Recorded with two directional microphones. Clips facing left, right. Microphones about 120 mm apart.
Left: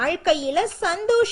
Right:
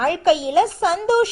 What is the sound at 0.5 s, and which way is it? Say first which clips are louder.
Speech: right 5 dB; 40° right (ahead or behind).